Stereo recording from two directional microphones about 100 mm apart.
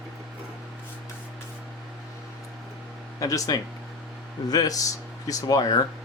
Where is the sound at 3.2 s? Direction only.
35° left (ahead or behind).